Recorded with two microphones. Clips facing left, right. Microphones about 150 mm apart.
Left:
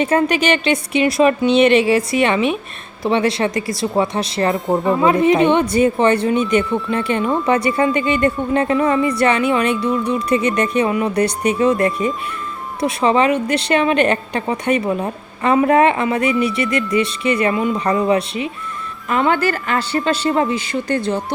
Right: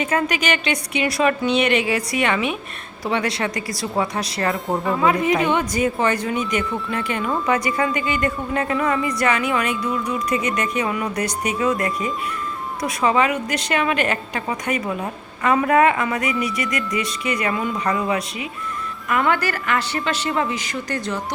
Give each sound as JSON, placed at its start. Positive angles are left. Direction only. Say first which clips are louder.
{"t": 0.0, "sound": "speech", "louder": "left 6 dB", "side_deg": 30}
{"t": 4.5, "sound": "speech", "louder": "left 5 dB", "side_deg": 0}
{"t": 4.9, "sound": "speech", "louder": "left 5 dB", "side_deg": 25}